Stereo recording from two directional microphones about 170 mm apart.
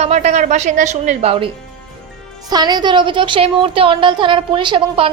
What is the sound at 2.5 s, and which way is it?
A woman's voice, 25° right (ahead or behind).